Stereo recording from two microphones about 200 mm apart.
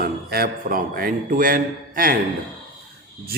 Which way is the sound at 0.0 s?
50° right (ahead or behind).